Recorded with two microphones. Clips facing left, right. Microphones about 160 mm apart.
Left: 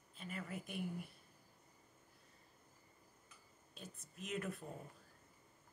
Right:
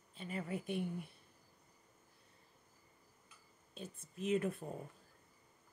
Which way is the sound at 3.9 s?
30° right (ahead or behind).